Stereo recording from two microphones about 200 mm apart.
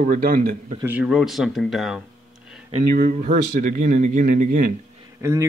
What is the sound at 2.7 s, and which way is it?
Speech, 40° right (ahead or behind).